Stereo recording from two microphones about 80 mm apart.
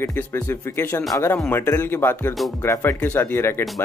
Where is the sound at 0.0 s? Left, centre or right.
Left.